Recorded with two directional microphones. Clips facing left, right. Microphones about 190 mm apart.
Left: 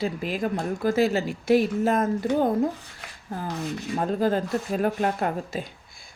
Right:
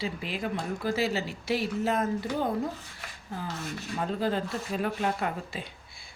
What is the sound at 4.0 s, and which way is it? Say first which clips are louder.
Speech: left 5 dB; 45° left (ahead or behind).